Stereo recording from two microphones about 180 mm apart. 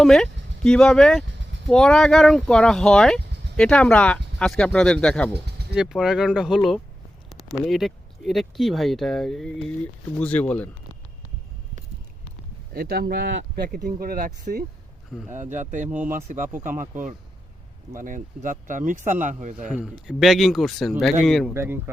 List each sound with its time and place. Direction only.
0.0 s speech: centre (ahead or behind)
12.7 s speech: 55° right (ahead or behind)
15.9 s speech: 10° right (ahead or behind)
16.6 s speech: 45° right (ahead or behind)
19.7 s speech: 5° right (ahead or behind)
21.5 s speech: 15° right (ahead or behind)